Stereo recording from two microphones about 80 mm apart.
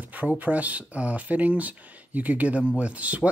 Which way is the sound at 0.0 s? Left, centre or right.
Right.